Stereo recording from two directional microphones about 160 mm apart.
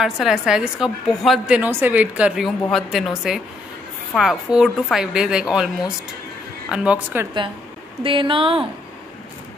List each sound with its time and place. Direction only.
0.0 s a woman's voice: 5° right (ahead or behind)
6.7 s a woman's voice: 5° right (ahead or behind)
8.0 s speech: 35° right (ahead or behind)